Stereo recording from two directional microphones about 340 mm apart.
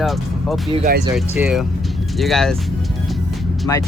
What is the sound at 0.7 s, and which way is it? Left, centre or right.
Speech, right.